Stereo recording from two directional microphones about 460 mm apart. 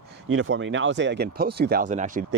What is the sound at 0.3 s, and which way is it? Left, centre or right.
Speech, right.